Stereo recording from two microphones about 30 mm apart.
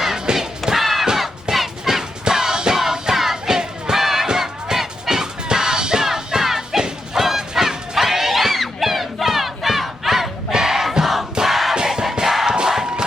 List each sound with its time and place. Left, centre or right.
0.3 s a sound: centre
1.5 s music: centre
2.2 s music: centre
3.9 s battle cry: centre
4.4 s music: centre
6.7 s a sound: right
10.5 s battle cry: centre
11.4 s music: centre
11.7 s music: right
12.2 s music: centre
12.5 s battle cry: right